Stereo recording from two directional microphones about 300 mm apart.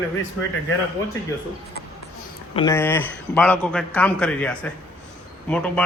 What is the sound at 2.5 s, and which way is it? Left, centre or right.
A man's voice, centre.